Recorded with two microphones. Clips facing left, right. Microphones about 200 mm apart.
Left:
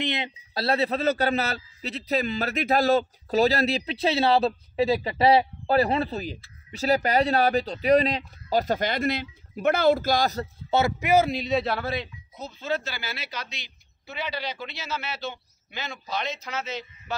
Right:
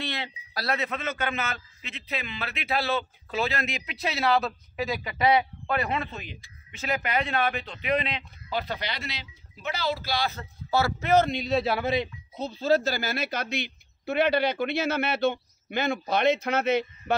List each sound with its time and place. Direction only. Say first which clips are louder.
0.0 s a man's voice: left 5 dB; 20° left (ahead or behind); by 10.4 s 45° left (ahead or behind)
10.7 s speech: left 2 dB; 20° left (ahead or behind)
11.1 s a man's voice: even; 5° left (ahead or behind)
11.8 s speech: right 4 dB; 20° right (ahead or behind)
12.4 s speech: right 6 dB; 35° right (ahead or behind); by 16.8 s 60° right (ahead or behind)